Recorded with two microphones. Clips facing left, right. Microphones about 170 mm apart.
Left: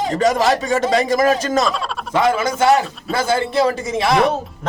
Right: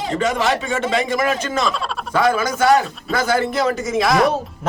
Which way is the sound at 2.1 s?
25° left (ahead or behind).